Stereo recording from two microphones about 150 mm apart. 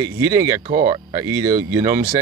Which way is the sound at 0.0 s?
20° right (ahead or behind).